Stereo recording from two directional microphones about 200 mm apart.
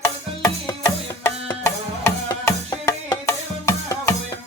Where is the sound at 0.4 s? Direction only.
15° left (ahead or behind).